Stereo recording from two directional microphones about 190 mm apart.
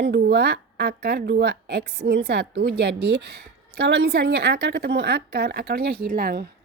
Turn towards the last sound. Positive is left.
turn(degrees=-50)  # may be behind; listen again after turning